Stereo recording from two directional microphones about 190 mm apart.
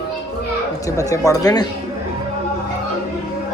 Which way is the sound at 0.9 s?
15° left (ahead or behind).